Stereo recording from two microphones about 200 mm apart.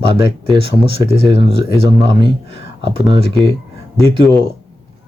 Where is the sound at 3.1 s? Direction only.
25° right (ahead or behind).